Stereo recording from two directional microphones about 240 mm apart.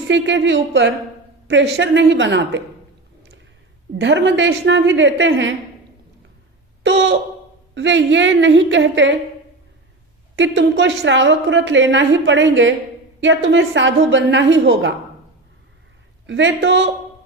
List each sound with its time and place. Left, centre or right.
0.1 s a woman's voice: right
3.9 s a woman's voice: right
6.8 s a woman's voice: right
10.3 s a woman's voice: right
16.2 s a woman's voice: right